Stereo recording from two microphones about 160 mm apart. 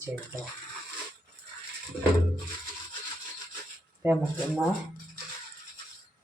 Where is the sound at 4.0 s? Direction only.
10° right (ahead or behind).